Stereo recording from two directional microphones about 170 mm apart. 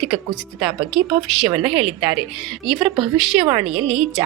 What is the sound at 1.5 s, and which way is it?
Speech, 30° right (ahead or behind).